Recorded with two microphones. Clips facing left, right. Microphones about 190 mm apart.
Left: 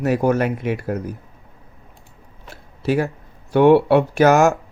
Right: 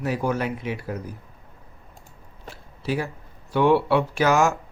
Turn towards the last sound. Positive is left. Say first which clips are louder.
# left 6 dB
turn(degrees=45)  # may be behind; listen again after turning